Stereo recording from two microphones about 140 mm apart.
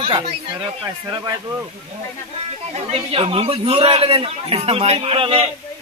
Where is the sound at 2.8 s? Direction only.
45° right (ahead or behind).